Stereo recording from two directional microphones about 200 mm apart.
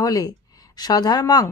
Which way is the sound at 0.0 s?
20° left (ahead or behind).